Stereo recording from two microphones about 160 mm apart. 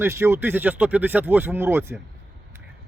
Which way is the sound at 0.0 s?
15° right (ahead or behind).